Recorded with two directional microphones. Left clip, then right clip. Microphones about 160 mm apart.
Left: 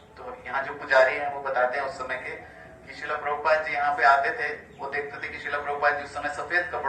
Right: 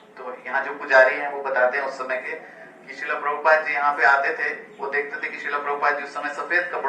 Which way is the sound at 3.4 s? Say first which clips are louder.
Right 5 dB; 15° left (ahead or behind).